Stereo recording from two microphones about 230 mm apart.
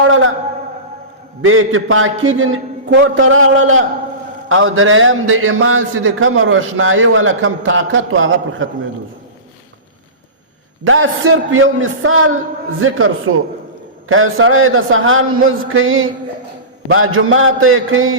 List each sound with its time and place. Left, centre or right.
0.0 s a sound: right
1.4 s a man's voice: right
10.8 s a man's voice: right